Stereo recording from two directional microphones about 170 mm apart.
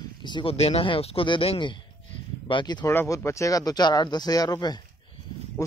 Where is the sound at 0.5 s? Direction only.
40° left (ahead or behind).